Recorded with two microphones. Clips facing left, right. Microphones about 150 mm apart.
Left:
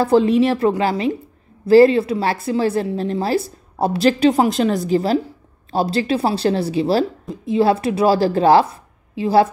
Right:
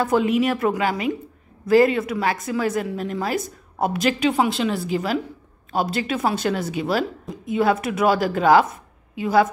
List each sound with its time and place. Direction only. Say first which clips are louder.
0.0 s a woman's voice: left 5 dB; 35° left (ahead or behind)